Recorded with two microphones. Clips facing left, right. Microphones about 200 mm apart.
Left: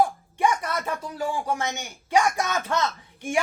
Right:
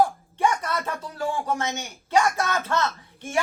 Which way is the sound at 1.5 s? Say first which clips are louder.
Right 1 dB; 15° left (ahead or behind).